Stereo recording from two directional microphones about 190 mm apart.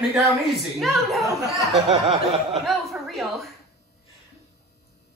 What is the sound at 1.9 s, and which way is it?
Snicker, 35° right (ahead or behind).